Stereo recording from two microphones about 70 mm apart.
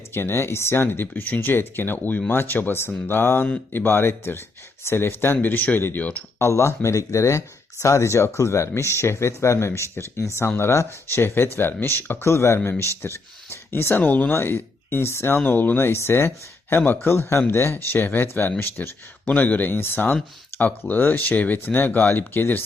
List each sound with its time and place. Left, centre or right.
0.1 s speech: left
6.4 s speech: left
12.5 s speech: left
15.4 s speech: left